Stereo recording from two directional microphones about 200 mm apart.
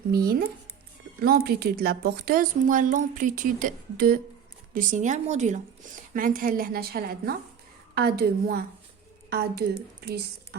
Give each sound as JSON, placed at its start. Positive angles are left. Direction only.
{"t": 0.1, "sound": "a woman's voice", "side_deg": -50}